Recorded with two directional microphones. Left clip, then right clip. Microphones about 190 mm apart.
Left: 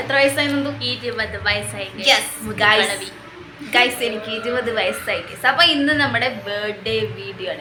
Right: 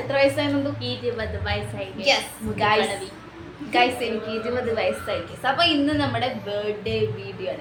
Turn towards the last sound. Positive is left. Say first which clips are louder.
# left 3 dB
turn(degrees=0)  # may be behind; listen again after turning